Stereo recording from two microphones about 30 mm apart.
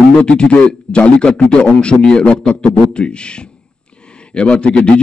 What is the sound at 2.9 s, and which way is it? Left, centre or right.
Speech, left.